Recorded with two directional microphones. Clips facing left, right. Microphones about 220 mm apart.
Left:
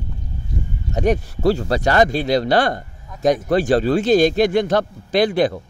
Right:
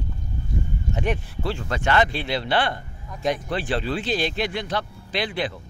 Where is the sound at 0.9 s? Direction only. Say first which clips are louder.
Left 9 dB; 40° left (ahead or behind).